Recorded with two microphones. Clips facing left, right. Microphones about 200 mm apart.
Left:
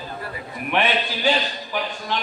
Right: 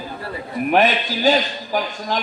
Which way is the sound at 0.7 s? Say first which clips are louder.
Right 4 dB; 40° right (ahead or behind).